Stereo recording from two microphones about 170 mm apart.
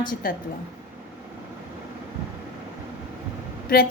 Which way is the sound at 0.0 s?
55° left (ahead or behind).